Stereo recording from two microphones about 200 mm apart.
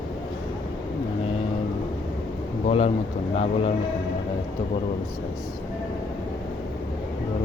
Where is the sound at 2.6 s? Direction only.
30° left (ahead or behind).